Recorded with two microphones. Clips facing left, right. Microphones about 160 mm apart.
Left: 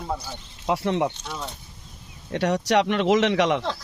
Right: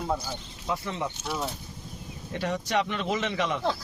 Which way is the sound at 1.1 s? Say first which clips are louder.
Right 2 dB; 5° right (ahead or behind).